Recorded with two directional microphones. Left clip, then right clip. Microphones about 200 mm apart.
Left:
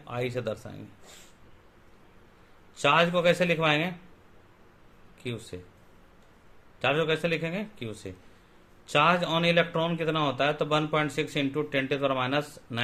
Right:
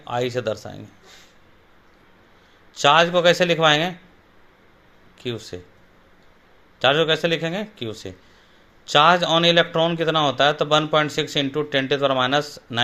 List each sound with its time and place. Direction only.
0.0 s a man's voice: 35° right (ahead or behind)
2.8 s a man's voice: 35° right (ahead or behind)
5.2 s a man's voice: 30° right (ahead or behind)
6.8 s a man's voice: 30° right (ahead or behind)